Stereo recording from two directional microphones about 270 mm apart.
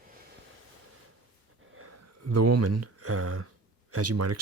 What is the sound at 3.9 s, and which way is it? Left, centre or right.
Speech, right.